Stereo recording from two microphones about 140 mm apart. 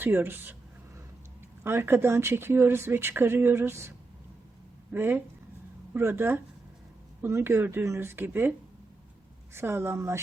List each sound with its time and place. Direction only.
0.0 s speech: 15° right (ahead or behind)
1.6 s speech: 15° right (ahead or behind)
9.6 s speech: 15° right (ahead or behind)